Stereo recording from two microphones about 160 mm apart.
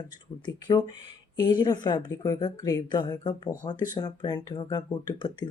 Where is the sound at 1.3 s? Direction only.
25° left (ahead or behind).